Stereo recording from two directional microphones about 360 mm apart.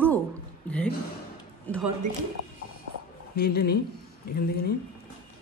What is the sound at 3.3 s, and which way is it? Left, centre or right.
Speech, left.